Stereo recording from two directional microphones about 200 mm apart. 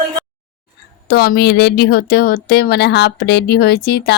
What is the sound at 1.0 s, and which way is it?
Speech, 50° left (ahead or behind).